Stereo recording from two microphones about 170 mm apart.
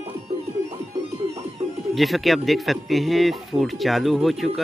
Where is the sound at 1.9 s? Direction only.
Centre (ahead or behind).